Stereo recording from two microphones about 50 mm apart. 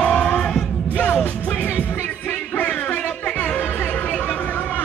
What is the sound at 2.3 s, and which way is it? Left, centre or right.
Music, left.